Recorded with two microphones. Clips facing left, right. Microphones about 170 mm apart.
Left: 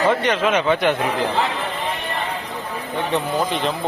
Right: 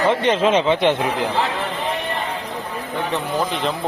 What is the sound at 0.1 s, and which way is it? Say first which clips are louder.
Speech: right 2 dB; 30° right (ahead or behind).